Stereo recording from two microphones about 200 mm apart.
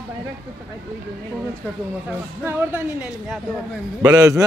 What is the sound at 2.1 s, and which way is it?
Speech, 10° right (ahead or behind).